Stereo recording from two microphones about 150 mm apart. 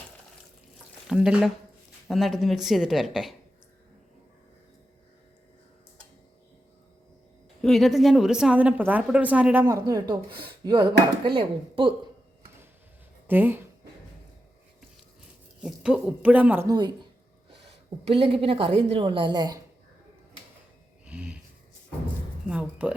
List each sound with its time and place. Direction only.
1.0 s speech: 5° right (ahead or behind)
7.6 s a woman's voice: centre (ahead or behind); by 11.9 s 35° right (ahead or behind)
13.2 s a woman's voice: 15° right (ahead or behind)
15.6 s a woman's voice: 5° right (ahead or behind)
16.6 s speech: 30° right (ahead or behind)
18.1 s a woman's voice: 35° right (ahead or behind)
21.0 s a sound: 10° right (ahead or behind)
22.4 s speech: 10° right (ahead or behind)